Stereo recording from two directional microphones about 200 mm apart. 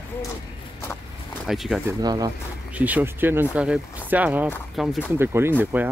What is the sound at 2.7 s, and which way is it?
Speech, 10° right (ahead or behind).